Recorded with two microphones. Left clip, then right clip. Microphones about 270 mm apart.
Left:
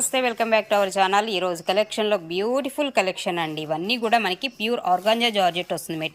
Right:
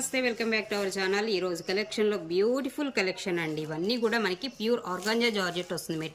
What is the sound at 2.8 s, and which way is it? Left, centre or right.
Speech, left.